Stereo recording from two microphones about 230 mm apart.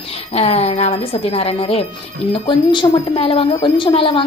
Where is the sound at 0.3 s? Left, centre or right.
Left.